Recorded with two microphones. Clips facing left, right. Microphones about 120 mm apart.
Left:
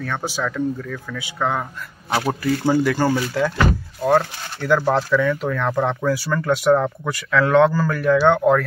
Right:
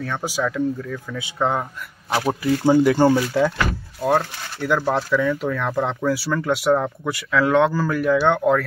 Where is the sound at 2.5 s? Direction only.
20° right (ahead or behind).